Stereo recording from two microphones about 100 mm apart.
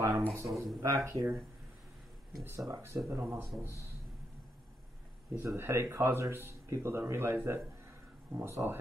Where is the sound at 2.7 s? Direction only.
25° right (ahead or behind).